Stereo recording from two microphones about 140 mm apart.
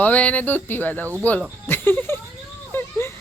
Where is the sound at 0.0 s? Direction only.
10° left (ahead or behind).